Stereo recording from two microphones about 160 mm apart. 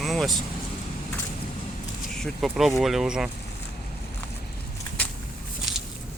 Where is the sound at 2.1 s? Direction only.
Centre (ahead or behind).